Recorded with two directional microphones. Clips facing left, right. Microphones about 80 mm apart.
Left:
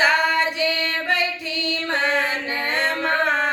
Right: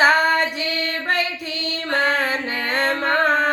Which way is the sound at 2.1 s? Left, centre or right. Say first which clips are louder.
Right 1 dB; right.